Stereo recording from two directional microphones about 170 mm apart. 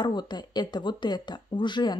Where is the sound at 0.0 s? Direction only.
25° left (ahead or behind).